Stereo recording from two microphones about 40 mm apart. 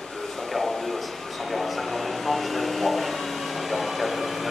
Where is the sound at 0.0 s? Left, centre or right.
Centre.